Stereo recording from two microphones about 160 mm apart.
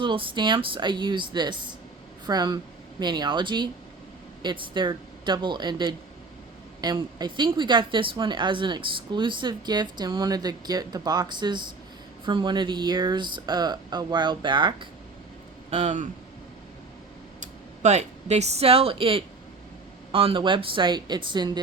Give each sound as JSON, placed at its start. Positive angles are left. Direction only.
{"t": 0.0, "sound": "speech", "side_deg": -30}
{"t": 15.7, "sound": "speech", "side_deg": -45}
{"t": 17.4, "sound": "speech", "side_deg": -45}